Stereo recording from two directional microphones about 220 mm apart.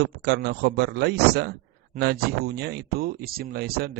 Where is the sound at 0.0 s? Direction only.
50° right (ahead or behind).